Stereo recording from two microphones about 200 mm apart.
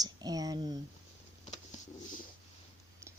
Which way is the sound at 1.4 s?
35° left (ahead or behind).